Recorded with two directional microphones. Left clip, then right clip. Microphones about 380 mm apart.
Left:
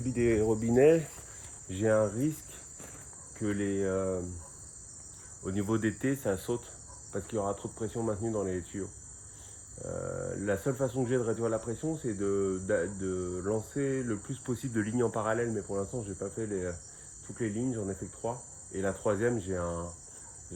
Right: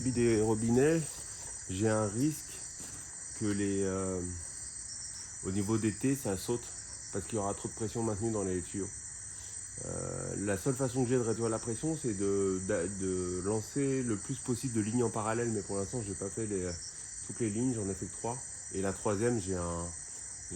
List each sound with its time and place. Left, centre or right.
0.0 s cricket: centre
3.4 s cricket: centre
5.5 s cricket: centre
9.8 s cricket: centre